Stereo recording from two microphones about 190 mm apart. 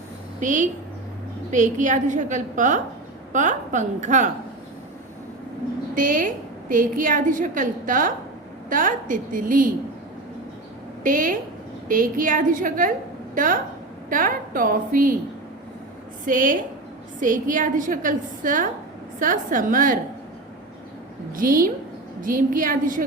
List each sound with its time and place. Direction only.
0.3 s a woman's voice: 40° right (ahead or behind)
5.9 s a woman's voice: 45° right (ahead or behind)
11.0 s a woman's voice: 45° right (ahead or behind)
16.2 s a woman's voice: 45° right (ahead or behind)
21.3 s a woman's voice: 45° right (ahead or behind)